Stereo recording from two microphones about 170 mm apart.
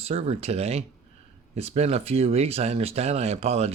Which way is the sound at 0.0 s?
35° right (ahead or behind).